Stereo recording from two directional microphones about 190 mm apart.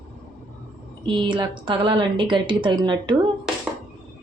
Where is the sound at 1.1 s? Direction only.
25° right (ahead or behind).